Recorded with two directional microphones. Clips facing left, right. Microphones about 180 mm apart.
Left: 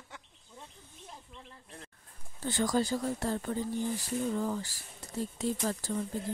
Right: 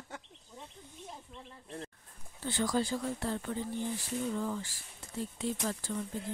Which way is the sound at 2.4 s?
45° left (ahead or behind).